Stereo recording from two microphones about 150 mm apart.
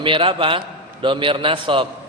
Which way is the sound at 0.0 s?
35° right (ahead or behind).